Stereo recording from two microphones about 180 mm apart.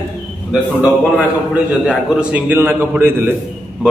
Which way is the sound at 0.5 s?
5° right (ahead or behind).